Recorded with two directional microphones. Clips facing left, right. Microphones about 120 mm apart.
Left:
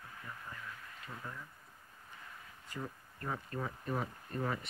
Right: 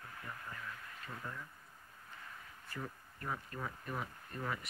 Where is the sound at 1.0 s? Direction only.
5° left (ahead or behind).